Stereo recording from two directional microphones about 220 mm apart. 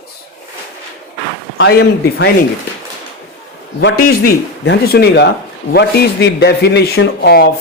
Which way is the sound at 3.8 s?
60° left (ahead or behind).